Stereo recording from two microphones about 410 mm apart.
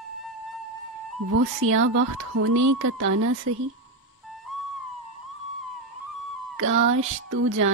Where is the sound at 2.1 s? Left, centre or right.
Right.